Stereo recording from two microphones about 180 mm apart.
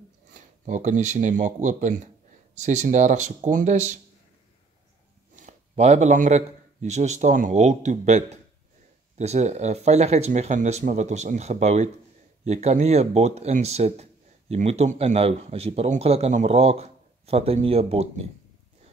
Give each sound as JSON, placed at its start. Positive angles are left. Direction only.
{"t": 0.3, "sound": "speech", "side_deg": -45}
{"t": 5.3, "sound": "a man's voice", "side_deg": -40}